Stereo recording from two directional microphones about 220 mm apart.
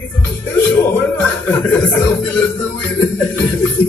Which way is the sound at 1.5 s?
5° left (ahead or behind).